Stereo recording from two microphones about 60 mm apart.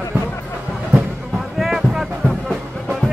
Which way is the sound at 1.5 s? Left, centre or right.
Centre.